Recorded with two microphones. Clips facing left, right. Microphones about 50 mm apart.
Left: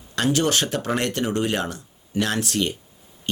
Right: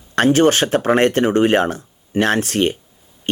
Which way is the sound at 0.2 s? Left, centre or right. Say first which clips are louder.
Right 8 dB; right.